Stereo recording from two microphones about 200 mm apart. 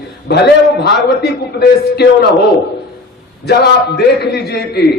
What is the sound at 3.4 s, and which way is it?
A man's voice, 55° left (ahead or behind).